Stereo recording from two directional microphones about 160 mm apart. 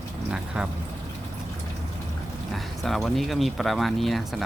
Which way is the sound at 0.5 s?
5° right (ahead or behind).